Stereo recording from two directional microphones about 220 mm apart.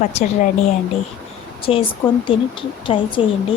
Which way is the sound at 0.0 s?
30° left (ahead or behind).